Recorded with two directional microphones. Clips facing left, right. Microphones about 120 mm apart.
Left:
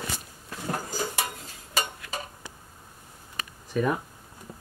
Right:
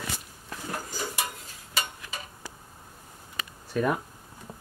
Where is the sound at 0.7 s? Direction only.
30° left (ahead or behind).